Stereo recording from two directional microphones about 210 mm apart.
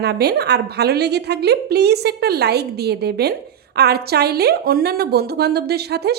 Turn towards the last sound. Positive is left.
turn(degrees=-50)  # may be behind; listen again after turning